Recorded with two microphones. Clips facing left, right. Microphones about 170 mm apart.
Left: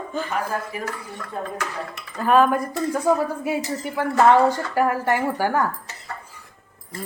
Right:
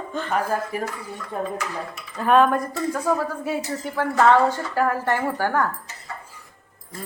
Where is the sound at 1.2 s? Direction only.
65° left (ahead or behind).